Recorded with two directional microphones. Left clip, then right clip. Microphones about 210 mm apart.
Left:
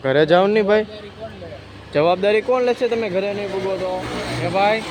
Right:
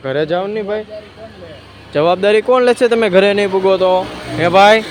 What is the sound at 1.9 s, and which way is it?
Speech, 10° right (ahead or behind).